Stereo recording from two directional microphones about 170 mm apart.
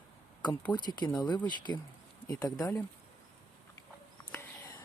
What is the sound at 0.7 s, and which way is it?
Speech, 25° left (ahead or behind).